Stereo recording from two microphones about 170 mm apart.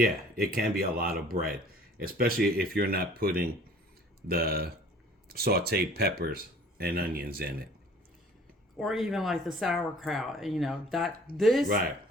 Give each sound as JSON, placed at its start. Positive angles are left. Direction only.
{"t": 0.0, "sound": "speech", "side_deg": -60}
{"t": 8.8, "sound": "speech", "side_deg": 0}